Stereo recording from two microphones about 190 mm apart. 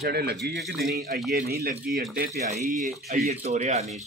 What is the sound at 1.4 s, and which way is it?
Speech, 55° right (ahead or behind).